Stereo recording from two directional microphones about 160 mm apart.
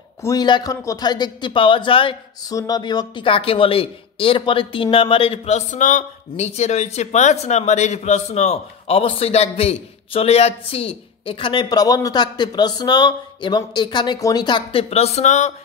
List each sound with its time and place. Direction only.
0.2 s speech: 25° left (ahead or behind); by 15.5 s 45° left (ahead or behind)